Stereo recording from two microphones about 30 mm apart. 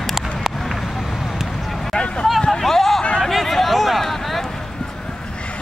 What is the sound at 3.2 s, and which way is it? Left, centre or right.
Hubbub, centre.